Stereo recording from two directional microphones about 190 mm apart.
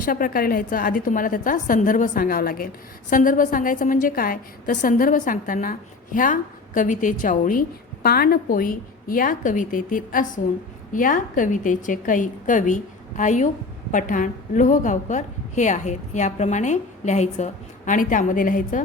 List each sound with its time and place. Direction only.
0.0 s a woman's voice: 50° left (ahead or behind)